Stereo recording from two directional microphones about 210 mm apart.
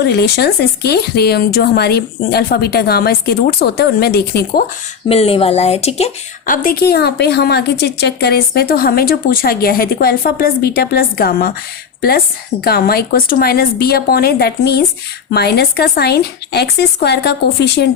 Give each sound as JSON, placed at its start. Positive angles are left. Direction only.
{"t": 0.0, "sound": "a woman's voice", "side_deg": 50}
{"t": 5.0, "sound": "a woman's voice", "side_deg": 30}
{"t": 12.6, "sound": "a woman's voice", "side_deg": 45}